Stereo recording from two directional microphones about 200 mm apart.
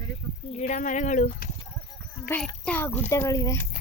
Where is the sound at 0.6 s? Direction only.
40° left (ahead or behind).